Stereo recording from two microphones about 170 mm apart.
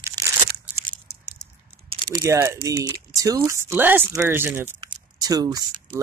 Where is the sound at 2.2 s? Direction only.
15° right (ahead or behind).